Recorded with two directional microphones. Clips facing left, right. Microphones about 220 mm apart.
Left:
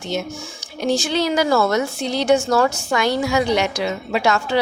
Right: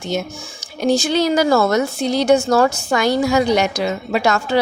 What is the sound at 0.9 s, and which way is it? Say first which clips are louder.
A woman's voice: right 3 dB; 40° right (ahead or behind).